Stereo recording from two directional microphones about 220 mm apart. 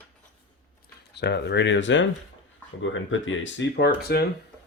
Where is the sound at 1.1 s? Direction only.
50° left (ahead or behind).